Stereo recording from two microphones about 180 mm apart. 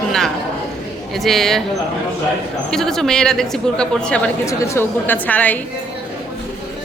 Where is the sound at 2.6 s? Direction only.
5° left (ahead or behind).